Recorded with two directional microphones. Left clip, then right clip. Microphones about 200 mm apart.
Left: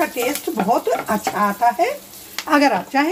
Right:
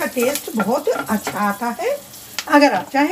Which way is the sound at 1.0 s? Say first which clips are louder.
Left 2 dB; 65° left (ahead or behind).